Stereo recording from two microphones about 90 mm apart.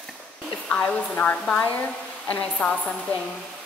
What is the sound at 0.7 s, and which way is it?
Speech, 15° left (ahead or behind).